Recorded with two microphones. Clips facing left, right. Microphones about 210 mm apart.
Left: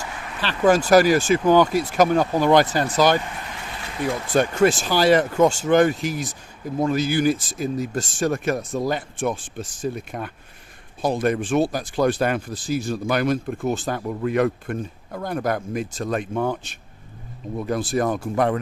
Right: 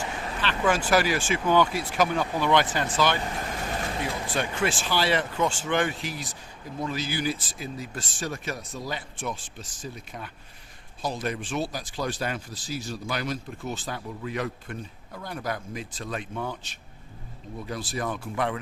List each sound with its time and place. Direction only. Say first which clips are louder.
0.4 s speech: left 8 dB; 40° left (ahead or behind)
4.4 s speech: left 11 dB; 45° left (ahead or behind)